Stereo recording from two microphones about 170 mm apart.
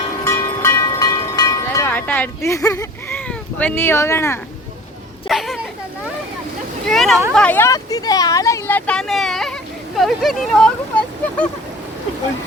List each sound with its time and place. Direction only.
0.3 s a sound: 15° left (ahead or behind)
1.9 s speech: 10° left (ahead or behind)
5.3 s speech: centre (ahead or behind)
6.8 s speech: centre (ahead or behind)